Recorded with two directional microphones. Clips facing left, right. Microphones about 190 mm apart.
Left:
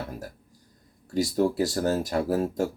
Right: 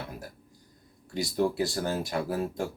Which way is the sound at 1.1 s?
40° left (ahead or behind).